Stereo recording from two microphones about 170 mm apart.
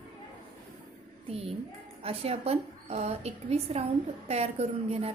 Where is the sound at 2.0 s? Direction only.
35° right (ahead or behind).